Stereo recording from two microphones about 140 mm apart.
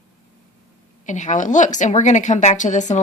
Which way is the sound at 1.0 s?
60° left (ahead or behind).